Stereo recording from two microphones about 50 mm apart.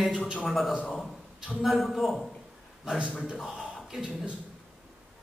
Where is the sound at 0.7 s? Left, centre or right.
Centre.